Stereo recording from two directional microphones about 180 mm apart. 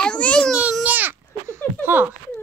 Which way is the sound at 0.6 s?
10° right (ahead or behind).